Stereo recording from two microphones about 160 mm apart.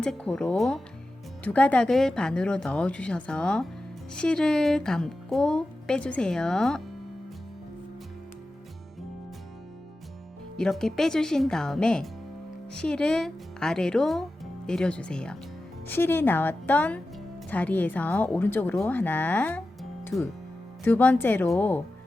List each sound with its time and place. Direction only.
0.0 s a child's voice: 5° left (ahead or behind)
10.6 s a child's voice: 5° left (ahead or behind)